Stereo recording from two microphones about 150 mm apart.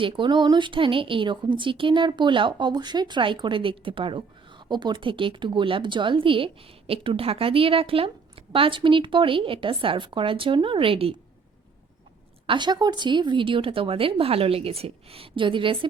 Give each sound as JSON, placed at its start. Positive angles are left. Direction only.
{"t": 0.0, "sound": "a woman's voice", "side_deg": -30}
{"t": 12.5, "sound": "a woman's voice", "side_deg": -30}